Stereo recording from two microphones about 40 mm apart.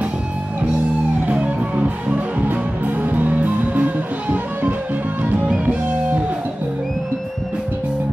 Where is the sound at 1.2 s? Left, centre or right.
Right.